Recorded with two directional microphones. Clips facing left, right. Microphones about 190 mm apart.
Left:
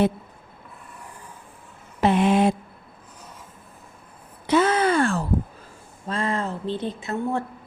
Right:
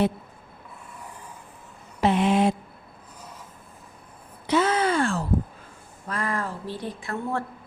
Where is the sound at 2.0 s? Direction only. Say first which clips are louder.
Left 2 dB; 55° left (ahead or behind).